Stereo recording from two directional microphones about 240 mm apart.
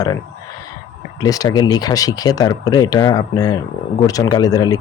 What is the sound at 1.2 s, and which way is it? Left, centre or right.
Speech, centre.